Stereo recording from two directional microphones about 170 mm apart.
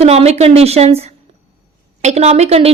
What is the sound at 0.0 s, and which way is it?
A woman's voice, 40° right (ahead or behind).